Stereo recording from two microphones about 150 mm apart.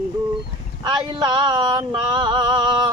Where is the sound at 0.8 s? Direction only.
30° right (ahead or behind).